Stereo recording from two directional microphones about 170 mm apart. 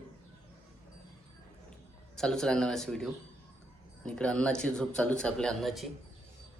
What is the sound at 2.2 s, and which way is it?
Speech, 5° left (ahead or behind).